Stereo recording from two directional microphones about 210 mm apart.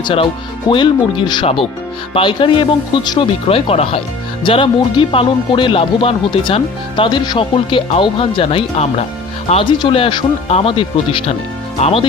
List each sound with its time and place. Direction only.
0.0 s speech: 25° left (ahead or behind)